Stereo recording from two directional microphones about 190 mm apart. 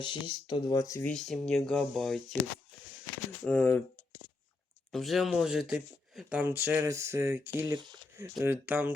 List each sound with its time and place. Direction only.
0.0 s speech: 25° left (ahead or behind)
1.1 s speech: centre (ahead or behind)
3.4 s speech: 5° left (ahead or behind); by 8.9 s 10° right (ahead or behind)